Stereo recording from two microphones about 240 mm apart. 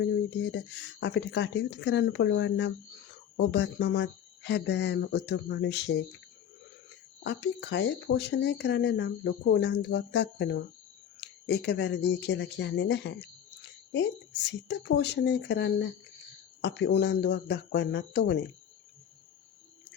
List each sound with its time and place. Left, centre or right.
0.0 s speech: left
7.3 s speech: left